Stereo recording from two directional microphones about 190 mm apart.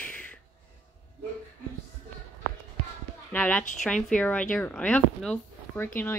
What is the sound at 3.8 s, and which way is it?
Speech, 5° left (ahead or behind).